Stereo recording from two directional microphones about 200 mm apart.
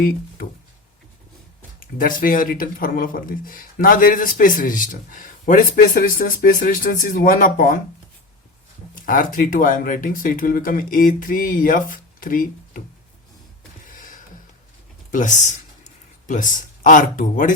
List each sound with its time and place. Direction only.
1.8 s speech: 45° left (ahead or behind)
9.0 s speech: 40° left (ahead or behind)
13.9 s a sound: 40° left (ahead or behind)
15.1 s speech: 40° left (ahead or behind)